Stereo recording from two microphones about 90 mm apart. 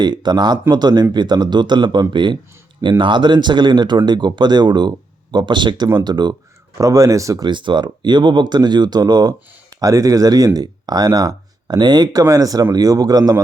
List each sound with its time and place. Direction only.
0.0 s speech: 50° right (ahead or behind)
6.7 s speech: 35° right (ahead or behind)
7.4 s speech: 60° right (ahead or behind); by 13.3 s 45° right (ahead or behind)